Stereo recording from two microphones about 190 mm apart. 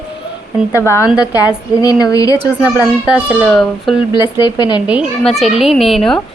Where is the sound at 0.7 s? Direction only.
15° left (ahead or behind).